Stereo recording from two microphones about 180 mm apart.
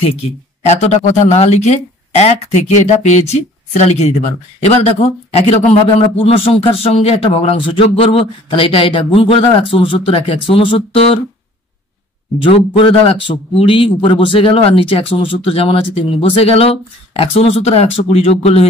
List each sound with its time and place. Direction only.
0.7 s a man's voice: 35° left (ahead or behind)
12.4 s a man's voice: 30° left (ahead or behind)